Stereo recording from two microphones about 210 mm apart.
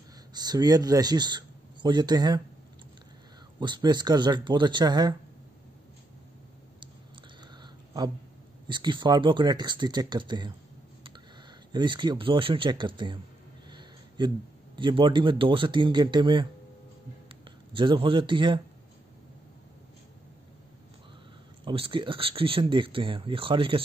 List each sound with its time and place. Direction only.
0.3 s speech: 20° right (ahead or behind)
3.5 s speech: 20° right (ahead or behind)
7.6 s a sound: 20° right (ahead or behind)
8.6 s speech: 20° right (ahead or behind)
11.7 s speech: 20° right (ahead or behind)
13.7 s a sound: 20° right (ahead or behind)
14.8 s speech: 25° right (ahead or behind)
21.6 s speech: 25° right (ahead or behind)